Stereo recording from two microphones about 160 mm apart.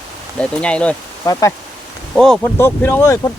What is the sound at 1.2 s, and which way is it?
Speech, 20° left (ahead or behind).